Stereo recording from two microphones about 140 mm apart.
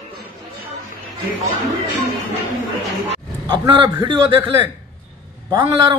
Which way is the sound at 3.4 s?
35° right (ahead or behind).